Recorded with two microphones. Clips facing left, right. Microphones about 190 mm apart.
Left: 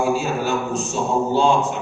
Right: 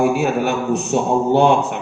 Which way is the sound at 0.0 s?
60° right (ahead or behind).